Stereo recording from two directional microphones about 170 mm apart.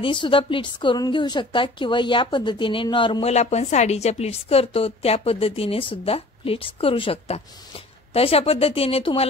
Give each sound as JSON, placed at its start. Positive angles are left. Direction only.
{"t": 0.0, "sound": "a woman's voice", "side_deg": 30}